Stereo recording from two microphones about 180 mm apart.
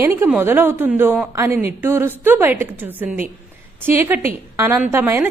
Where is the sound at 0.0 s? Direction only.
15° right (ahead or behind).